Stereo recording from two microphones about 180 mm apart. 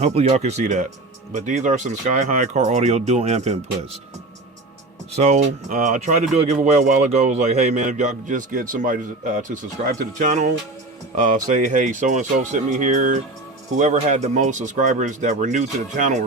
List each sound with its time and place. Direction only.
0.0 s speech: 35° right (ahead or behind)
5.1 s speech: 40° right (ahead or behind)
11.5 s speech: 45° right (ahead or behind)